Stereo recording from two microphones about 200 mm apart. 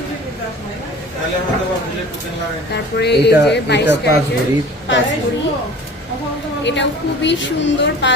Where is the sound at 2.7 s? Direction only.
55° left (ahead or behind).